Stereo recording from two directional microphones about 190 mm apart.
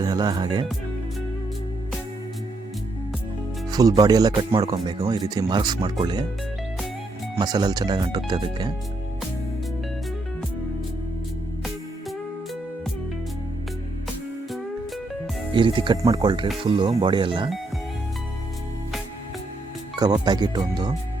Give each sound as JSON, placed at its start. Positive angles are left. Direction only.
{"t": 0.0, "sound": "speech", "side_deg": -20}
{"t": 3.7, "sound": "speech", "side_deg": -20}
{"t": 7.3, "sound": "speech", "side_deg": -20}
{"t": 15.5, "sound": "speech", "side_deg": -25}
{"t": 20.2, "sound": "speech", "side_deg": -20}